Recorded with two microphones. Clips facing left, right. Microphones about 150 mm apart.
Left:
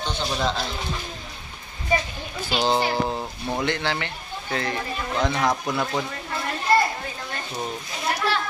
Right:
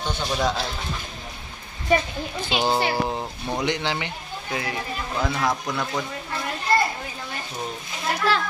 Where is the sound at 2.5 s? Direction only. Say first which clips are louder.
Left 1 dB; 10° right (ahead or behind).